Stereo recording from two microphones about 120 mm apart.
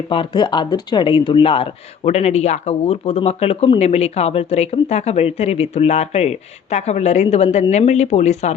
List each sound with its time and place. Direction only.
0.1 s speech: 45° left (ahead or behind)
2.0 s a woman's voice: 65° left (ahead or behind)